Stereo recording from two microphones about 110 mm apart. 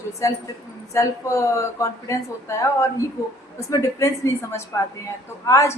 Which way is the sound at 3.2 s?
30° left (ahead or behind).